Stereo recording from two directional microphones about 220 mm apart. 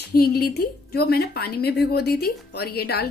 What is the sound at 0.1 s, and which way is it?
A woman's voice, 45° left (ahead or behind).